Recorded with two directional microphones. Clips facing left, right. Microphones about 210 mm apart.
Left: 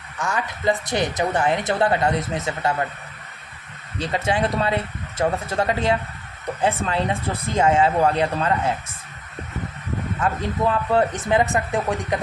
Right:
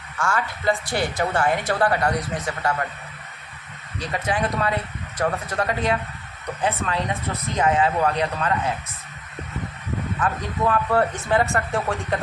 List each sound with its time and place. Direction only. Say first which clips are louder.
0.2 s speech: even; 20° left (ahead or behind)
4.0 s speech: left 3 dB; 25° left (ahead or behind)
10.2 s speech: left 3 dB; 25° left (ahead or behind)